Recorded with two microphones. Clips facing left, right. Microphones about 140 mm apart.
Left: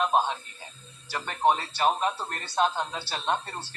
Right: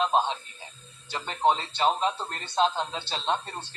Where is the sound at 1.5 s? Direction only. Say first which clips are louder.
Even; 20° right (ahead or behind).